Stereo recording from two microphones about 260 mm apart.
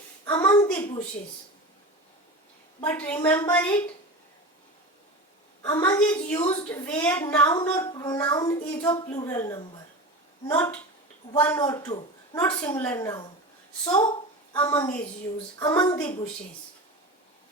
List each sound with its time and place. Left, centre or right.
0.3 s a sound: centre
2.8 s a woman's voice: centre
5.6 s a woman's voice: centre